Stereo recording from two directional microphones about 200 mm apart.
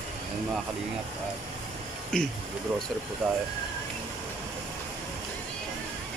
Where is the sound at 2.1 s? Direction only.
5° left (ahead or behind).